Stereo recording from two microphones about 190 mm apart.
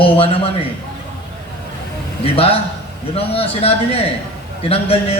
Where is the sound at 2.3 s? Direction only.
30° left (ahead or behind).